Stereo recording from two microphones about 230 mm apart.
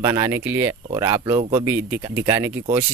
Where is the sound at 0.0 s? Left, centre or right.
Centre.